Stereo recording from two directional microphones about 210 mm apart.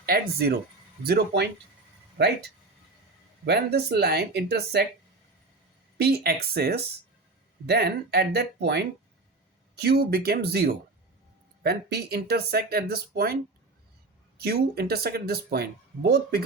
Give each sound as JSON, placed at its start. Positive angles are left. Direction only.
{"t": 0.0, "sound": "speech", "side_deg": -45}
{"t": 6.0, "sound": "speech", "side_deg": -50}
{"t": 14.4, "sound": "speech", "side_deg": -50}